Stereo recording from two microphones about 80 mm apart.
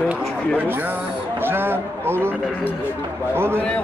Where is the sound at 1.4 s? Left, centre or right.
Right.